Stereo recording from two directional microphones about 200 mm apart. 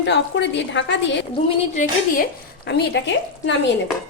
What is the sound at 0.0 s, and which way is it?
A woman's voice, 60° left (ahead or behind).